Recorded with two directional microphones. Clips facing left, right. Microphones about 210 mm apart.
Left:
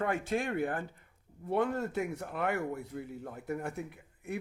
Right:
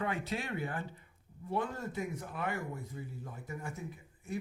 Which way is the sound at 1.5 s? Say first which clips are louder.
Left 6 dB; 60° left (ahead or behind).